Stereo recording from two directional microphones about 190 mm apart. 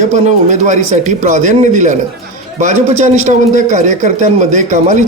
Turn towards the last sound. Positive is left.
turn(degrees=-40)  # may be behind; listen again after turning